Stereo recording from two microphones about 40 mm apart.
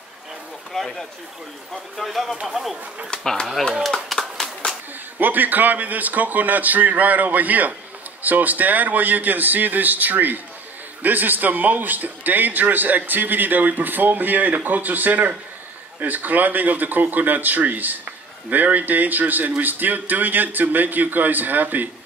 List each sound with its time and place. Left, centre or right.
0.7 s speech: centre
1.7 s speech: centre
3.1 s speech: left
3.8 s a sound: centre
5.2 s speech: right